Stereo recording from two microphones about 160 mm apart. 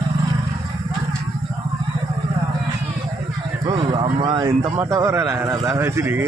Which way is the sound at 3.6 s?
30° right (ahead or behind).